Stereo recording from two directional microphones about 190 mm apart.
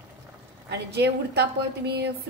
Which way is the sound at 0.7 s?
60° right (ahead or behind).